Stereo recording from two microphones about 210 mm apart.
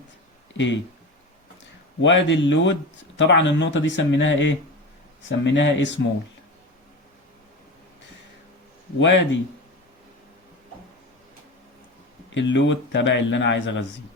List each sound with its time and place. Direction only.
0.5 s speech: 60° left (ahead or behind)
2.0 s a man's voice: 60° left (ahead or behind)
9.0 s a man's voice: 60° left (ahead or behind)
12.3 s a man's voice: 60° left (ahead or behind)